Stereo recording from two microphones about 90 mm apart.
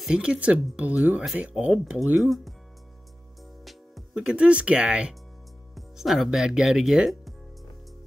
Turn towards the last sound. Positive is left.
turn(degrees=-5)  # may be behind; listen again after turning